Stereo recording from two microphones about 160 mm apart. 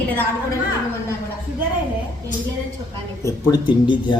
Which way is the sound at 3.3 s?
30° left (ahead or behind).